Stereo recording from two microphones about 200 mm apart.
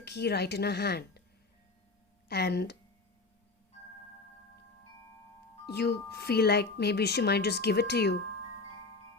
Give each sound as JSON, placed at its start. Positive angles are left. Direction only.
{"t": 0.0, "sound": "a woman's voice", "side_deg": 55}
{"t": 2.3, "sound": "a woman's voice", "side_deg": 55}
{"t": 5.6, "sound": "speech", "side_deg": 55}